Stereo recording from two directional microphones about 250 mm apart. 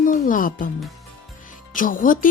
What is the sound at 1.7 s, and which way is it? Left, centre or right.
Speech, left.